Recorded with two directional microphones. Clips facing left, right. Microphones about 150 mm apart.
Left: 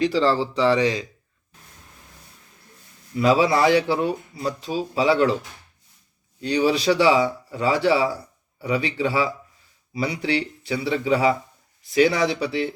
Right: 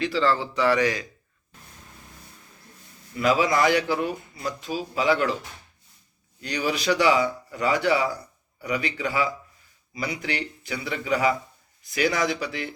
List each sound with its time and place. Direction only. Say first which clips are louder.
0.0 s speech: left 4 dB; 35° left (ahead or behind)
3.2 s speech: left 3 dB; 30° left (ahead or behind)
6.4 s speech: left 6 dB; 30° left (ahead or behind)